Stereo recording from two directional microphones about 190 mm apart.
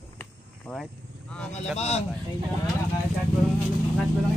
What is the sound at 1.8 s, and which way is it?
Speech, 35° left (ahead or behind).